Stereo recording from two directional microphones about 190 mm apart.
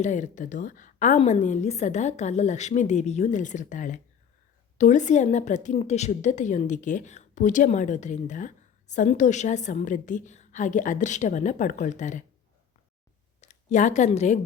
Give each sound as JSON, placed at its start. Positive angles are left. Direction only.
{"t": 0.0, "sound": "a woman's voice", "side_deg": 40}
{"t": 13.4, "sound": "speech", "side_deg": 35}